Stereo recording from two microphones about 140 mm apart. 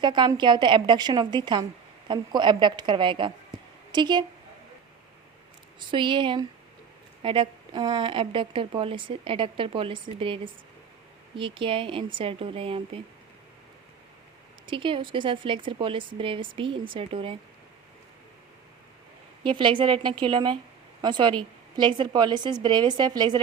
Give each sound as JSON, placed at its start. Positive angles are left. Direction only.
{"t": 0.0, "sound": "a woman's voice", "side_deg": -35}
{"t": 5.9, "sound": "a woman's voice", "side_deg": -35}
{"t": 14.7, "sound": "a woman's voice", "side_deg": -35}
{"t": 19.4, "sound": "a woman's voice", "side_deg": -35}